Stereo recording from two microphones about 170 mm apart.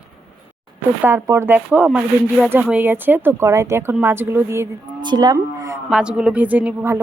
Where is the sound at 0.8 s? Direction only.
15° right (ahead or behind).